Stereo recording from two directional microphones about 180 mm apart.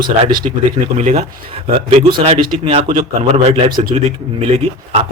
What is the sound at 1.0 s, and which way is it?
Speech, 35° right (ahead or behind).